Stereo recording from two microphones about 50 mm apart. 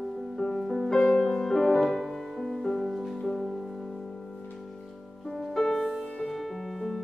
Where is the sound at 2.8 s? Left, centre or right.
Centre.